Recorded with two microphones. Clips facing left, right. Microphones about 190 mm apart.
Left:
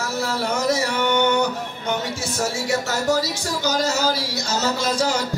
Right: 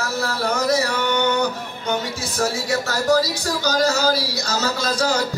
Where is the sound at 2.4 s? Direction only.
25° left (ahead or behind).